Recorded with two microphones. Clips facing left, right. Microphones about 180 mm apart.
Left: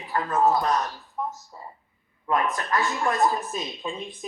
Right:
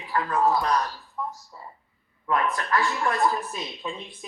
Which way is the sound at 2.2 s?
20° left (ahead or behind).